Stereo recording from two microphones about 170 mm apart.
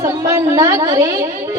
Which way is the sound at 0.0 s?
20° right (ahead or behind).